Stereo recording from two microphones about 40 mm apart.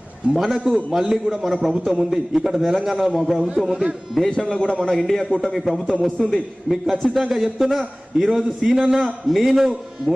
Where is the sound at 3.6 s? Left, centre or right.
Centre.